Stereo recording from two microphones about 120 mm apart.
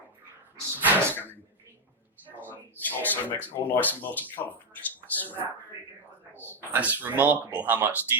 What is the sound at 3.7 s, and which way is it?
Speech, 15° left (ahead or behind).